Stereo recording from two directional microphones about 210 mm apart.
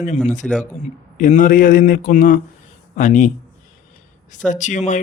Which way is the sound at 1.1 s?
35° left (ahead or behind).